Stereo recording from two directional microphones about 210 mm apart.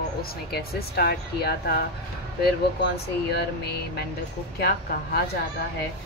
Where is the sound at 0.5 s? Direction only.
50° left (ahead or behind).